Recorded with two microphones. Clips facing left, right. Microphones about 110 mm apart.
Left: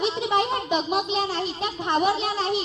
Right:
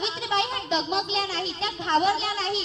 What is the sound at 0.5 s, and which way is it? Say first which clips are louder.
A child's voice: left 3 dB; 10° left (ahead or behind).